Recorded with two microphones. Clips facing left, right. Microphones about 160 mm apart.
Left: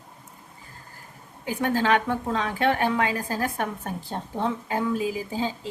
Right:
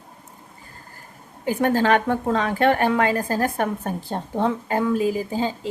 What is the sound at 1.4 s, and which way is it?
A woman's voice, 45° right (ahead or behind).